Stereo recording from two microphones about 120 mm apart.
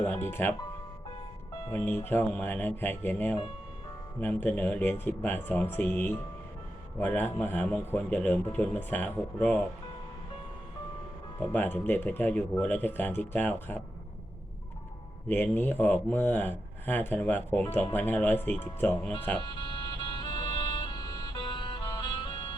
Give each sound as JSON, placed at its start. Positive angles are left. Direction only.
{"t": 0.0, "sound": "speech", "side_deg": 20}
{"t": 1.7, "sound": "speech", "side_deg": 15}
{"t": 11.3, "sound": "speech", "side_deg": 15}
{"t": 15.3, "sound": "speech", "side_deg": 15}
{"t": 20.0, "sound": "music", "side_deg": 40}